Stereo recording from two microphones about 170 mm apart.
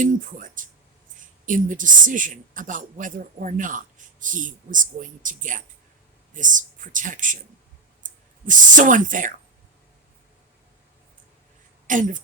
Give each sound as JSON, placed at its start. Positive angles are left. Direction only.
{"t": 0.0, "sound": "a woman's voice", "side_deg": -50}
{"t": 11.9, "sound": "a woman's voice", "side_deg": -50}